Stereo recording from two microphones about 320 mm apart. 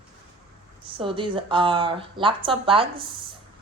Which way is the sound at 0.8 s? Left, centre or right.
Centre.